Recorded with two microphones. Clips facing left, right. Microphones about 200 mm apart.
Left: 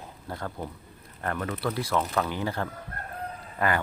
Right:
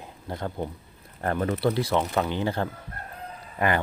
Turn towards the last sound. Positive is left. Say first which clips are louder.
# right 2 dB
turn(degrees=-20)  # may be behind; listen again after turning